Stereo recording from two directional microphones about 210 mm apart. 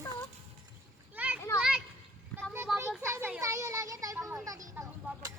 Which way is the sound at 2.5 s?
10° right (ahead or behind).